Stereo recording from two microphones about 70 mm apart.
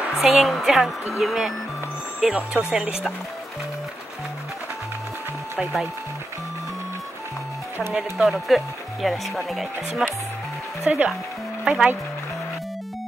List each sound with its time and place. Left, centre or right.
0.2 s speech: centre
7.9 s speech: centre
10.9 s speech: centre